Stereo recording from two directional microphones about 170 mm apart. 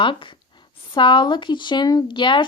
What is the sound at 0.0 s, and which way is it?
Speech, 30° left (ahead or behind).